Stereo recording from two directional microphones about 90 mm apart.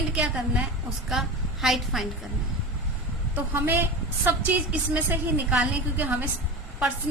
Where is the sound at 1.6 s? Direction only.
Centre (ahead or behind).